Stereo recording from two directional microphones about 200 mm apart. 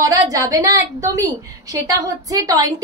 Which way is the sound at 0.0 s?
15° right (ahead or behind).